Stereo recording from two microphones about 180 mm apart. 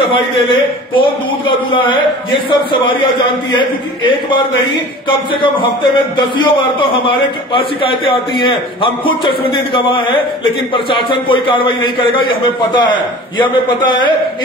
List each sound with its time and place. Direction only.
0.1 s a man's voice: 25° left (ahead or behind)
6.1 s a man's voice: 25° left (ahead or behind)